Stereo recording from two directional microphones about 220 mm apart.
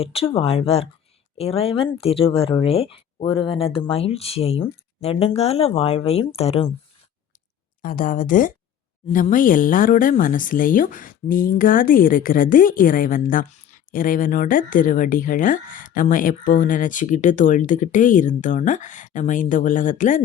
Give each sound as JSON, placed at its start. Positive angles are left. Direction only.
{"t": 0.0, "sound": "speech", "side_deg": 25}
{"t": 7.8, "sound": "speech", "side_deg": 40}